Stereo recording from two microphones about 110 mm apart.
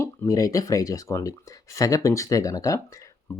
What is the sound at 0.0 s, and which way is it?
Speech, 30° left (ahead or behind).